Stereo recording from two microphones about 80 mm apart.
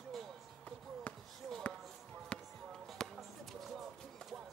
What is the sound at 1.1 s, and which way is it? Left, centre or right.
Basketball bounce, centre.